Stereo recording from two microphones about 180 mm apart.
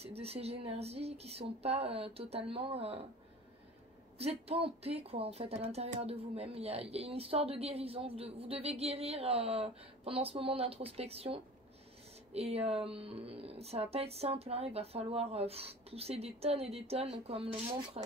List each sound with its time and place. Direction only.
0.0 s speech: 35° right (ahead or behind)
4.2 s speech: 35° right (ahead or behind)